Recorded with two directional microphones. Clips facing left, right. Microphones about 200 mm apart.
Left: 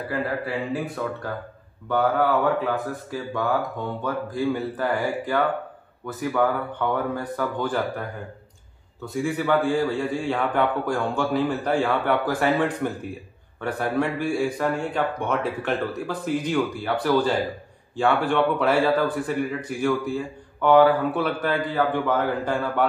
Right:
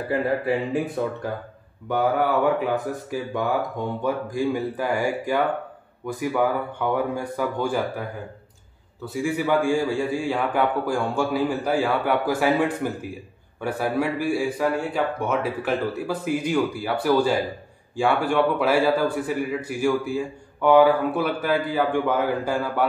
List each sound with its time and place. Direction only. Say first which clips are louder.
0.1 s speech: right 5 dB; 20° right (ahead or behind)
1.9 s a man's voice: even; 15° right (ahead or behind)
9.0 s a man's voice: even; 10° right (ahead or behind)